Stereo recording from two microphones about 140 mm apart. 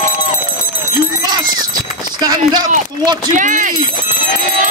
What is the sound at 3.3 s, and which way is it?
Speech, 65° right (ahead or behind).